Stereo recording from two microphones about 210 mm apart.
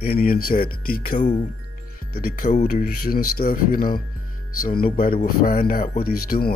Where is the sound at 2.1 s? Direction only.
45° left (ahead or behind).